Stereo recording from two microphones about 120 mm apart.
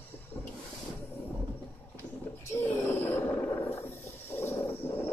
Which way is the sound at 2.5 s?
20° left (ahead or behind).